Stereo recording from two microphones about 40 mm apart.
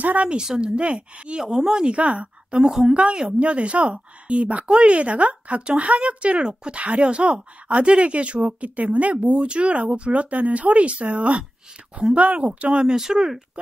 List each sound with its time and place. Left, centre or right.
0.0 s speech: right
0.5 s speech: right
1.4 s speech: centre
2.0 s a woman's voice: right
2.6 s speech: centre
2.9 s speech: right
6.4 s speech: right
12.8 s speech: centre